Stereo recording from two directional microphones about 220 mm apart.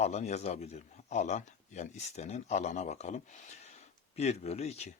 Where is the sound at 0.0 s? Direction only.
30° left (ahead or behind).